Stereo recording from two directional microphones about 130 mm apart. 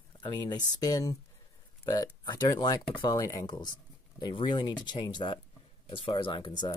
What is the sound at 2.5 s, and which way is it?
Speech, 25° left (ahead or behind).